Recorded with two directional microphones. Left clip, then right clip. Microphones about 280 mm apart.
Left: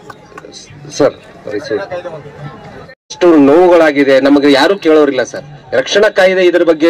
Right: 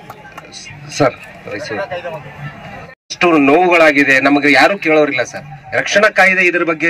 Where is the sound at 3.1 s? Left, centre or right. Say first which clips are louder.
Left 4 dB; centre.